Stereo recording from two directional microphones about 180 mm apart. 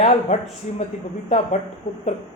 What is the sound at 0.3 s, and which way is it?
Speech, 40° left (ahead or behind).